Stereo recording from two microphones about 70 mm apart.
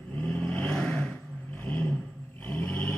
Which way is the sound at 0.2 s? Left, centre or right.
Left.